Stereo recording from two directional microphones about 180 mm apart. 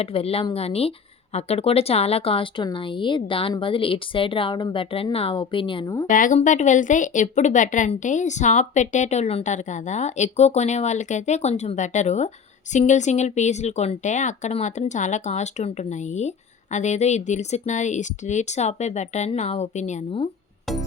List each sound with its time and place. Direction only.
0.0 s speech: 30° left (ahead or behind)
6.1 s speech: 45° left (ahead or behind)